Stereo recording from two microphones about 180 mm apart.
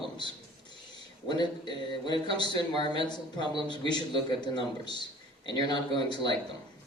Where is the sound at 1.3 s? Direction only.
25° left (ahead or behind).